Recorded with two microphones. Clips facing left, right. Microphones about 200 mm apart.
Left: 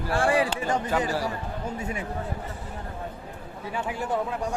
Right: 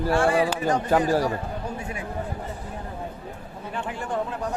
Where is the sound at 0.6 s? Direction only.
45° right (ahead or behind).